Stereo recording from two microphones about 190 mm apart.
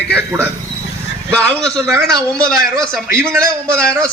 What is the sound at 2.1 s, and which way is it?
A man's voice, 20° right (ahead or behind).